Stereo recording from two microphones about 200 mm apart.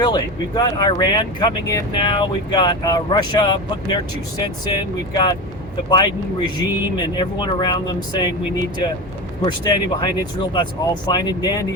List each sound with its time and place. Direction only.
0.0 s speech: 20° left (ahead or behind)
6.6 s speech: 20° left (ahead or behind)